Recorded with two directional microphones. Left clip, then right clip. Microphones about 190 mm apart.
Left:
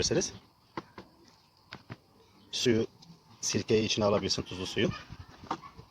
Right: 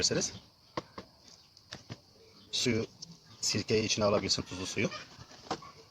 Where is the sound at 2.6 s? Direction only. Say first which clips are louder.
Left 6 dB; 40° left (ahead or behind).